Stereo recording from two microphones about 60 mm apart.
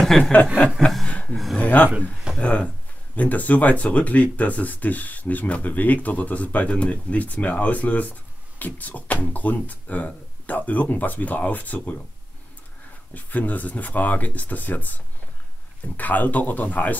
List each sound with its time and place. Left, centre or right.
0.2 s speech: left
1.0 s a sound: centre
1.3 s speech: centre
1.6 s speech: left
13.1 s speech: left
16.0 s speech: left